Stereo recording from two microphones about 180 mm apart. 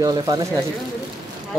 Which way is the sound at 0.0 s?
20° right (ahead or behind).